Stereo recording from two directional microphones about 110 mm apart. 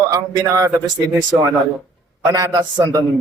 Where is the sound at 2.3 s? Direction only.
35° right (ahead or behind).